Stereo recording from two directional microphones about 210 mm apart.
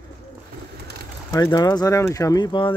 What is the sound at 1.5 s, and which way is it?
Speech, 20° left (ahead or behind).